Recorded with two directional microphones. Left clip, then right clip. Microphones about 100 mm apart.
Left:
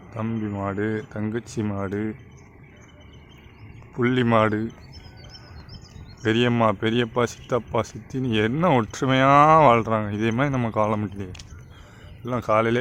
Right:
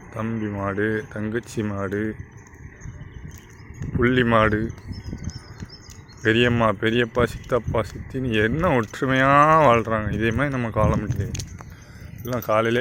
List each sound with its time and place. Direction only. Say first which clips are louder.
0.1 s speech: right 1 dB; centre (ahead or behind)
3.9 s speech: right 2 dB; 5° left (ahead or behind)
6.2 s speech: right 2 dB; 5° left (ahead or behind)
8.9 s speech: even; 25° left (ahead or behind)
10.5 s speech: even; 30° left (ahead or behind)
12.2 s speech: even; 10° left (ahead or behind)